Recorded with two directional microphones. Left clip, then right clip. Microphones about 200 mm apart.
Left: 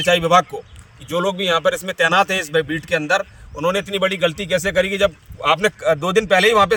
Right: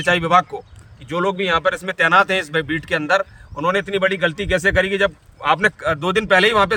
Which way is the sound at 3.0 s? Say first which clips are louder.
Right 1 dB; 5° right (ahead or behind).